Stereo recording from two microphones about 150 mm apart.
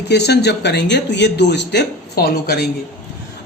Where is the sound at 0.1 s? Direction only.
90° left.